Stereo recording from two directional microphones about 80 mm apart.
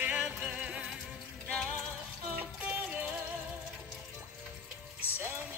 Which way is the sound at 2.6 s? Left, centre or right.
Centre.